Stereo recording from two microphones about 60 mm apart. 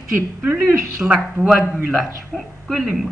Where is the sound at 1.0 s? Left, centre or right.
Centre.